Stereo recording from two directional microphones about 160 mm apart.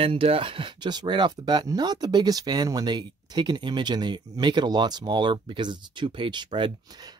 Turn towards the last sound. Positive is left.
turn(degrees=-30)  # may be behind; listen again after turning